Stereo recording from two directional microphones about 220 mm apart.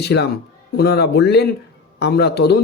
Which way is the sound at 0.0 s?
50° left (ahead or behind).